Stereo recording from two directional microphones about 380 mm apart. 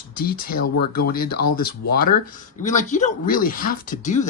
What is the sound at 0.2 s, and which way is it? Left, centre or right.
A man's voice, left.